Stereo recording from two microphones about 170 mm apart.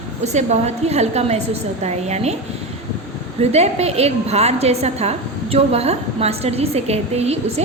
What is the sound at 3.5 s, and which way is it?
A woman's voice, 40° right (ahead or behind).